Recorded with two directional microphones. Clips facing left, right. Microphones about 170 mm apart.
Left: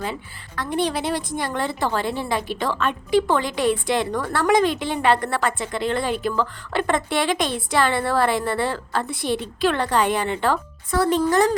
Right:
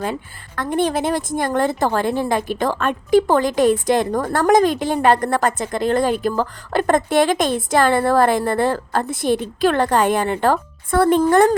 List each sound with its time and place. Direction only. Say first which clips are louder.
0.0 s speech: right 4 dB; 50° right (ahead or behind)